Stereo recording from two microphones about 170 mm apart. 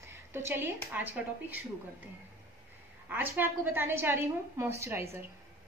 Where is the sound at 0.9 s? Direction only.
10° right (ahead or behind).